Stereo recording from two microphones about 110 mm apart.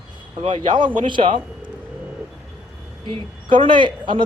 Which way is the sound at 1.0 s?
50° right (ahead or behind).